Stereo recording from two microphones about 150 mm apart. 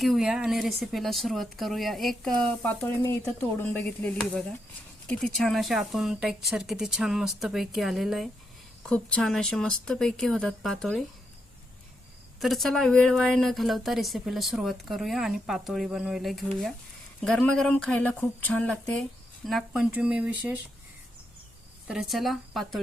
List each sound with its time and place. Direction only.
0.0 s a woman's voice: centre (ahead or behind)
12.4 s a woman's voice: centre (ahead or behind)
21.8 s a woman's voice: 5° right (ahead or behind)